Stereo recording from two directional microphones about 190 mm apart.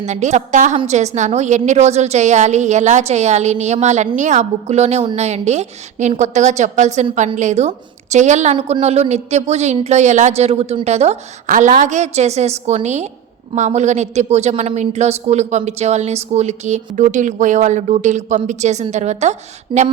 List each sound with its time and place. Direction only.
0.0 s a woman's voice: 40° right (ahead or behind)